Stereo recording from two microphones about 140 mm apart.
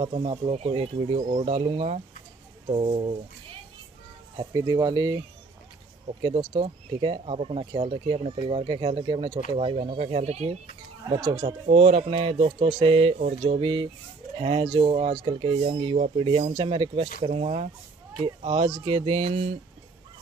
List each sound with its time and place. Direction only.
0.0 s speech: 45° right (ahead or behind)
1.2 s speech: 55° right (ahead or behind)
4.4 s speech: 25° right (ahead or behind)
6.2 s speech: 40° right (ahead or behind)
11.1 s speech: 35° right (ahead or behind)
16.0 s speech: 45° right (ahead or behind)